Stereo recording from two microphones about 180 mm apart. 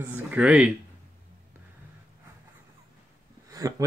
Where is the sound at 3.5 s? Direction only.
20° right (ahead or behind).